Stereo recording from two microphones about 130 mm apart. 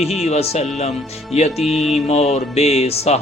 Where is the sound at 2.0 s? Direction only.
55° left (ahead or behind).